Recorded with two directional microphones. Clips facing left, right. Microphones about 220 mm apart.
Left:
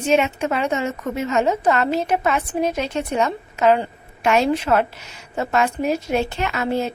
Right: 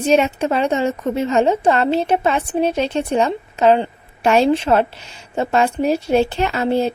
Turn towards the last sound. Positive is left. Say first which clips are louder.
# right 4 dB
turn(degrees=-30)  # may be behind; listen again after turning